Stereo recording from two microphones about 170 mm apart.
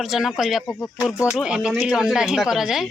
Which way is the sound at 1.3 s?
5° right (ahead or behind).